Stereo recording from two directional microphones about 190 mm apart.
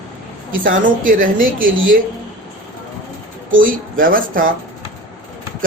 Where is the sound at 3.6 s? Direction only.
45° right (ahead or behind).